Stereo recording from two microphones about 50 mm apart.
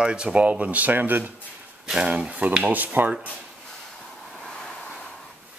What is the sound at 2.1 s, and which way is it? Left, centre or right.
Speech, right.